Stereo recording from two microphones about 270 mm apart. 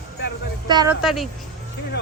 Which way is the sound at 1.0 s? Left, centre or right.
Centre.